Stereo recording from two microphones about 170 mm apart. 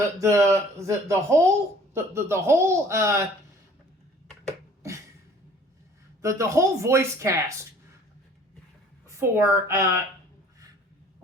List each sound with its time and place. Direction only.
0.2 s speech: 15° right (ahead or behind)
4.4 s a sound: 15° right (ahead or behind)
6.2 s speech: 15° right (ahead or behind)
9.0 s speech: 15° right (ahead or behind)